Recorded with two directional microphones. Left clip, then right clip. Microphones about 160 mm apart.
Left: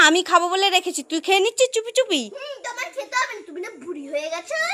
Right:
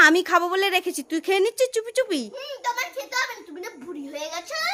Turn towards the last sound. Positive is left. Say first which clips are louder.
# left 3 dB
turn(degrees=-15)  # may be behind; listen again after turning